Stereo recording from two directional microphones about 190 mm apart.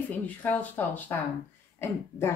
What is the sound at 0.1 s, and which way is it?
Speech, 10° left (ahead or behind).